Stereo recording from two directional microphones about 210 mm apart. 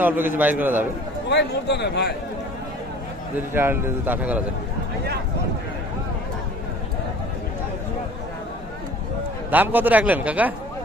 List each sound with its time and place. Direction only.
0.0 s a man's voice: 10° right (ahead or behind)
1.3 s a man's voice: 55° left (ahead or behind)
3.3 s a man's voice: 10° right (ahead or behind)
9.5 s a man's voice: 10° right (ahead or behind)